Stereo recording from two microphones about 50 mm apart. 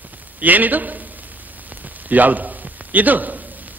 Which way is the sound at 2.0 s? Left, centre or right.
Right.